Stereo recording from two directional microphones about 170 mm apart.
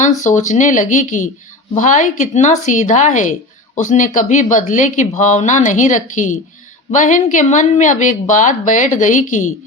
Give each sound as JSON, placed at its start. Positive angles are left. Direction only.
{"t": 0.2, "sound": "a woman's voice", "side_deg": 45}